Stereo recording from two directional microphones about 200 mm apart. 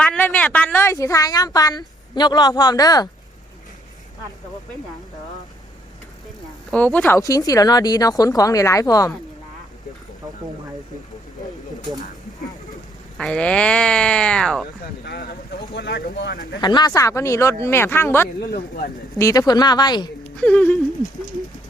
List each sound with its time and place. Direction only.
0.0 s a woman's voice: 5° left (ahead or behind)
6.7 s speech: 5° left (ahead or behind)
13.1 s speech: 5° left (ahead or behind)
15.0 s a sound: 50° left (ahead or behind)
15.7 s speech: 60° left (ahead or behind)
16.6 s speech: 20° left (ahead or behind)
18.5 s speech: 50° left (ahead or behind)
19.2 s a woman's voice: 20° left (ahead or behind)
20.4 s speech: 5° left (ahead or behind)